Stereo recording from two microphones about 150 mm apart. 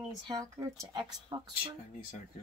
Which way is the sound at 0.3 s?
20° right (ahead or behind).